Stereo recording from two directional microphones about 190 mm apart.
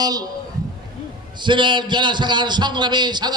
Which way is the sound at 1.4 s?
25° right (ahead or behind).